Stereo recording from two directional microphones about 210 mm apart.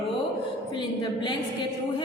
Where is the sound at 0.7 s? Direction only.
20° left (ahead or behind).